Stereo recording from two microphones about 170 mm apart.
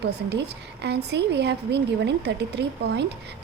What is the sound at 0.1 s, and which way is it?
A woman's voice, 80° right.